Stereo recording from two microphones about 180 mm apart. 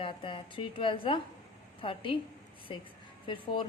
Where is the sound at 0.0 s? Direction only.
30° left (ahead or behind).